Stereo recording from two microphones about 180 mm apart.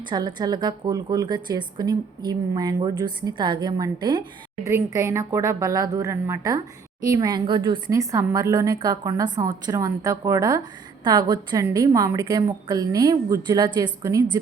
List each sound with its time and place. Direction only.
0.1 s speech: 25° right (ahead or behind)